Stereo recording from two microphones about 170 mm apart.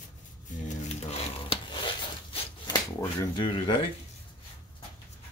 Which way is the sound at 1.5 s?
30° left (ahead or behind).